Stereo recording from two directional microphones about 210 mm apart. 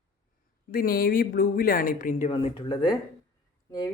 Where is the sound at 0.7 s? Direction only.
45° left (ahead or behind).